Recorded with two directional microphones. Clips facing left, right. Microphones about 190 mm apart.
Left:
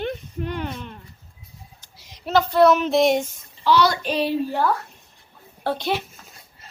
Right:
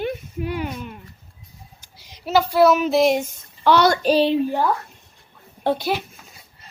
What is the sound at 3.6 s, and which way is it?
Speech, 55° right (ahead or behind).